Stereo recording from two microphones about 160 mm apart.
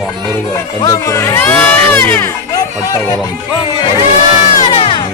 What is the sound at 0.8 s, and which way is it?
Speech, 20° left (ahead or behind).